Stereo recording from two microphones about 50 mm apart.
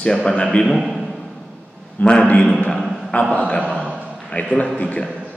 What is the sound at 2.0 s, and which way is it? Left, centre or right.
Speech, left.